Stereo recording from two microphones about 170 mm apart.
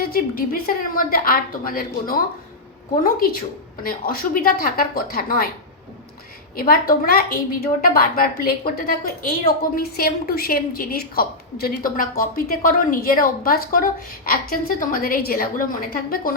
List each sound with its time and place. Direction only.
0.0 s a woman's voice: 60° left (ahead or behind)
6.6 s a woman's voice: 60° left (ahead or behind)